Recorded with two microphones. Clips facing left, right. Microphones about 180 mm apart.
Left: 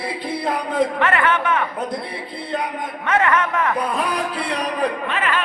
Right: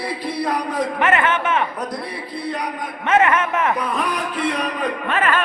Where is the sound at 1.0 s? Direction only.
20° right (ahead or behind).